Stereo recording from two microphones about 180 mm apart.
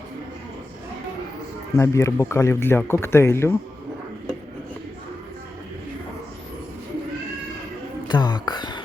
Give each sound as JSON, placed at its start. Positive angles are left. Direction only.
{"t": 1.7, "sound": "speech", "side_deg": 15}
{"t": 8.0, "sound": "music", "side_deg": 25}